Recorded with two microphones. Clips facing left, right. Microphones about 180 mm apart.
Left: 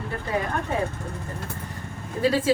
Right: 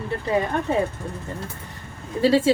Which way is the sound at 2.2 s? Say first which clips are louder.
Right 4 dB; 25° right (ahead or behind).